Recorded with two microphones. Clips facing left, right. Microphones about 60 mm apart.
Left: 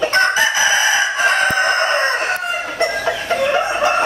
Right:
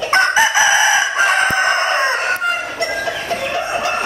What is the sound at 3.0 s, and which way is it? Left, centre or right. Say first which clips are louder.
Chicken: left 2 dB; left.